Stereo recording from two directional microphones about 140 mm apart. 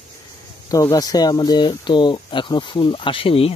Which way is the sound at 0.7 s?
25° left (ahead or behind).